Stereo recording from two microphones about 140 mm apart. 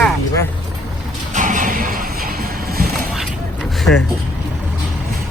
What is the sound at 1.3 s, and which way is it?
Music, 65° right (ahead or behind).